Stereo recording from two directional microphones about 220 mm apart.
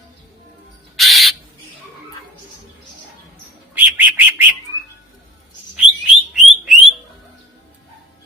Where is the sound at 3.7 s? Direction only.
10° right (ahead or behind).